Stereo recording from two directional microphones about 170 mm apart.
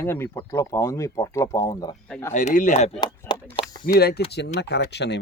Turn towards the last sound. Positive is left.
turn(degrees=80)